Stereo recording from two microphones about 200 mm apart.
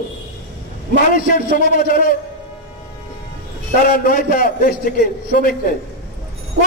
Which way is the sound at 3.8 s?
45° left (ahead or behind).